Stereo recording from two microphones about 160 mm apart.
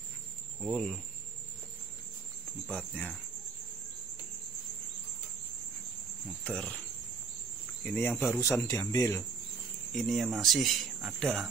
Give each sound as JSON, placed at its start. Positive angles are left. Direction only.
{"t": 0.6, "sound": "speech", "side_deg": 0}
{"t": 2.7, "sound": "speech", "side_deg": 10}
{"t": 6.4, "sound": "speech", "side_deg": 5}
{"t": 7.8, "sound": "speech", "side_deg": 10}
{"t": 9.9, "sound": "speech", "side_deg": 0}